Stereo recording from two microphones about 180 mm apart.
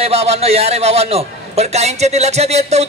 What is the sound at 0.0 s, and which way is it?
A man's voice, 35° right (ahead or behind).